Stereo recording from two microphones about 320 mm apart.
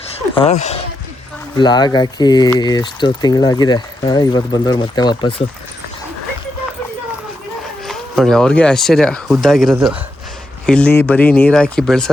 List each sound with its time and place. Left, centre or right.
0.3 s speech: left
7.9 s speech: centre